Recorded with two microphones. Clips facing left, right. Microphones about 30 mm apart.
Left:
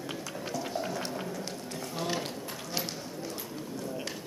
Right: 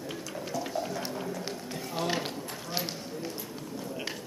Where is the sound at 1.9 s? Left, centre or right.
Centre.